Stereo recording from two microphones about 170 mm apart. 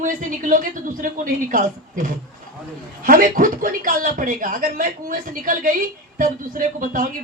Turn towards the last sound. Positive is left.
turn(degrees=-50)  # may be behind; listen again after turning